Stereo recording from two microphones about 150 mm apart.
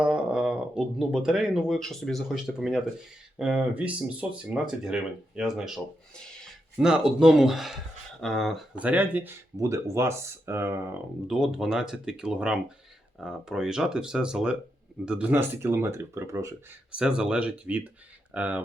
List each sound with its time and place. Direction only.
0.0 s speech: 5° right (ahead or behind)
11.3 s speech: 5° right (ahead or behind); by 16.6 s 20° right (ahead or behind)
16.9 s speech: 5° right (ahead or behind)